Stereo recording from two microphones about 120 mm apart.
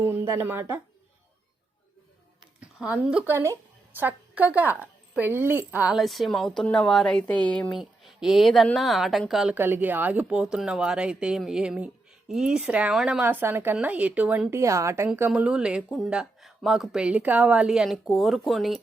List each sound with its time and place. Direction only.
0.0 s a woman's voice: 20° right (ahead or behind)
2.6 s speech: 10° right (ahead or behind)
3.3 s a woman's voice: 20° right (ahead or behind)
5.9 s speech: centre (ahead or behind)
7.8 s speech: 5° right (ahead or behind)
9.6 s speech: 20° right (ahead or behind)
14.5 s a woman's voice: 25° right (ahead or behind)
15.3 s speech: 10° right (ahead or behind)